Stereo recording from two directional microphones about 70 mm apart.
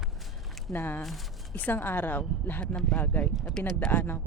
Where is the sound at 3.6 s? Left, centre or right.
Centre.